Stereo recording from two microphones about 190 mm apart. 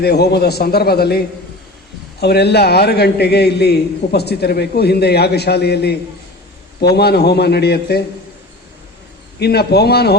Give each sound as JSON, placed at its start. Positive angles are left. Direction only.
{"t": 0.0, "sound": "a man's voice", "side_deg": 60}
{"t": 2.2, "sound": "a man's voice", "side_deg": 60}
{"t": 9.4, "sound": "a man's voice", "side_deg": 60}